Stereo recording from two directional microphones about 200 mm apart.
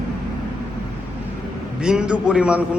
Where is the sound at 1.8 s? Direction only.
5° right (ahead or behind).